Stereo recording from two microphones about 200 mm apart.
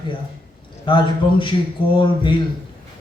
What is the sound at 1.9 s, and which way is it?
Speech, 25° left (ahead or behind).